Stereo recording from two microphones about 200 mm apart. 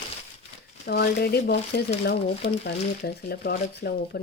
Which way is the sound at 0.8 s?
50° left (ahead or behind).